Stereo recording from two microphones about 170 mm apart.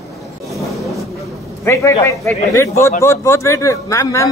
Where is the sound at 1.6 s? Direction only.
15° left (ahead or behind).